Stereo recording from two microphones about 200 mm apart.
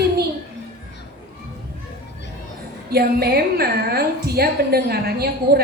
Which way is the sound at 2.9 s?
50° right (ahead or behind).